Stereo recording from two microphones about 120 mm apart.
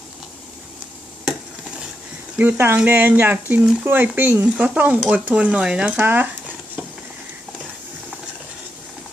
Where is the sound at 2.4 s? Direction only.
15° right (ahead or behind).